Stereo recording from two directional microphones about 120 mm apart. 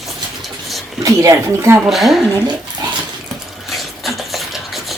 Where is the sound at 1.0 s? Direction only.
30° right (ahead or behind).